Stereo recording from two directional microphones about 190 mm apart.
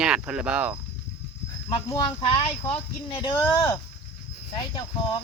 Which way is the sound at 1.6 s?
25° left (ahead or behind).